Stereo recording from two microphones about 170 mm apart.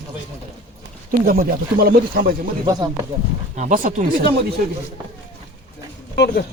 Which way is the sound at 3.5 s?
45° right (ahead or behind).